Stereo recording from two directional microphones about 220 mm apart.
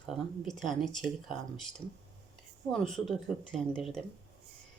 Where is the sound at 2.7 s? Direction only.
Centre (ahead or behind).